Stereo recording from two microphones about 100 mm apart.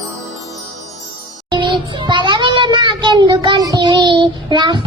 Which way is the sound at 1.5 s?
50° right (ahead or behind).